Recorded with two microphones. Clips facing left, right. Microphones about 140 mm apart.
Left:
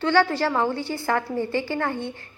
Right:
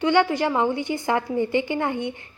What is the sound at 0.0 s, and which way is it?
A woman's voice, 15° right (ahead or behind).